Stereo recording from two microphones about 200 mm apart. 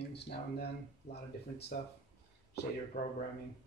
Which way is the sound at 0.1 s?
55° left (ahead or behind).